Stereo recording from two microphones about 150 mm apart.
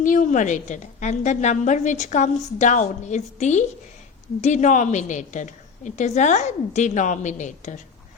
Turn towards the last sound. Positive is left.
turn(degrees=55)  # may be behind; listen again after turning